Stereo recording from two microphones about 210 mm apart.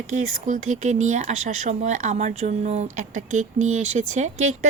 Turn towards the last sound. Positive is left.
turn(degrees=-35)  # may be behind; listen again after turning